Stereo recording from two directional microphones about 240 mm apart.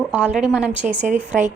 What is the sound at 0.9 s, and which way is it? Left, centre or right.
Speech, right.